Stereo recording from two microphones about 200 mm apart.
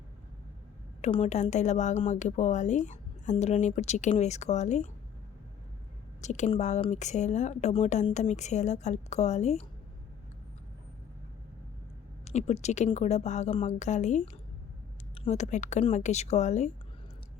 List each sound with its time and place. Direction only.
1.0 s a woman's voice: 30° left (ahead or behind)
6.2 s a woman's voice: 35° left (ahead or behind)
12.2 s a woman's voice: 35° left (ahead or behind)